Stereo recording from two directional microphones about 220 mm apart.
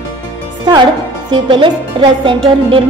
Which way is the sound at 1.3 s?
20° right (ahead or behind).